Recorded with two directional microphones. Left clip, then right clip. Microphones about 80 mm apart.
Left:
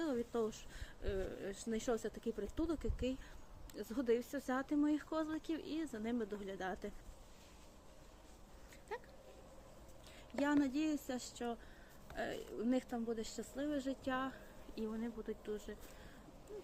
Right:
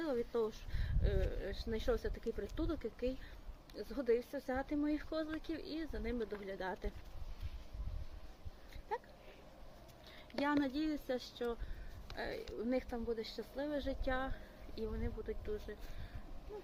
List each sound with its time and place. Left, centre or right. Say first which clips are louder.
0.0 s speech: right 2 dB; left
8.9 s a sound: right 5 dB; left
10.4 s speech: even; left